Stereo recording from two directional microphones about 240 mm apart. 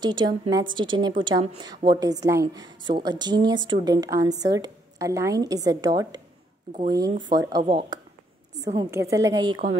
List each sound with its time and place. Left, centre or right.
0.0 s a woman's voice: centre